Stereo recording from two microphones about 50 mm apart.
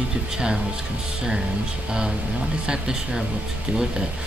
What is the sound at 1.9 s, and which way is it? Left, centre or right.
Speech, centre.